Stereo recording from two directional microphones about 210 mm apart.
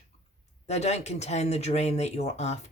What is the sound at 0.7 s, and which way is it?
Speech, 30° left (ahead or behind).